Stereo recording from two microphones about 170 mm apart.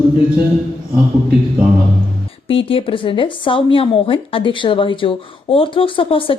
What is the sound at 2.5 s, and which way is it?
Speech, 30° left (ahead or behind).